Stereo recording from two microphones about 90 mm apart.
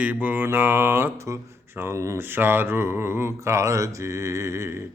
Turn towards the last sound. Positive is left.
turn(degrees=-30)  # may be behind; listen again after turning